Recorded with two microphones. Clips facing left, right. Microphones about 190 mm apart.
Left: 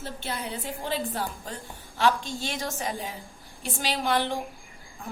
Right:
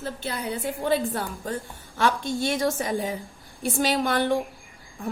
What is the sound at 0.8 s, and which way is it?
Speech, 55° right (ahead or behind).